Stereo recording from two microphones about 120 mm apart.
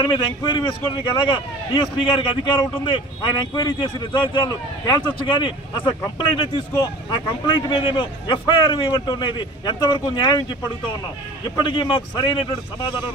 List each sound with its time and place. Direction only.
0.0 s a man's voice: 40° left (ahead or behind)
11.5 s a man's voice: 40° left (ahead or behind)